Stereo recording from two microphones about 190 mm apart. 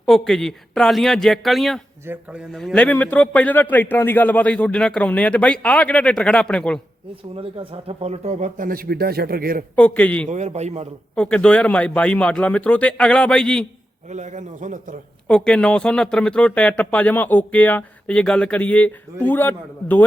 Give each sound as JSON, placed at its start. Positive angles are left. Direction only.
{"t": 0.0, "sound": "speech", "side_deg": 0}
{"t": 7.3, "sound": "speech", "side_deg": -30}
{"t": 9.7, "sound": "speech", "side_deg": 5}
{"t": 10.2, "sound": "a man's voice", "side_deg": -35}
{"t": 11.1, "sound": "speech", "side_deg": 5}
{"t": 14.1, "sound": "a man's voice", "side_deg": -40}
{"t": 15.3, "sound": "speech", "side_deg": 5}